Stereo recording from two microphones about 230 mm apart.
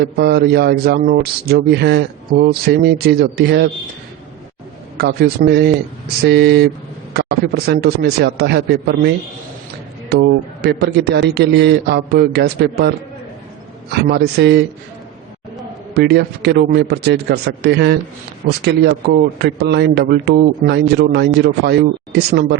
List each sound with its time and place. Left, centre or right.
0.0 s a man's voice: right
4.9 s a man's voice: right
14.1 s a man's voice: right
16.0 s a man's voice: right